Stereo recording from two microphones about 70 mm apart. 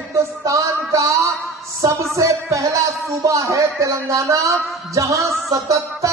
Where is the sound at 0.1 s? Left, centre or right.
Right.